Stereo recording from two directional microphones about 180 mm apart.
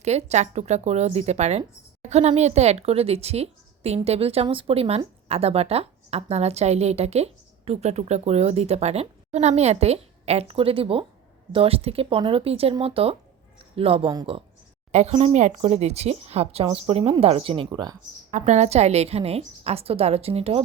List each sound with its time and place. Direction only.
0.0 s speech: 35° right (ahead or behind)
14.9 s speech: 35° right (ahead or behind)
18.3 s speech: 40° right (ahead or behind)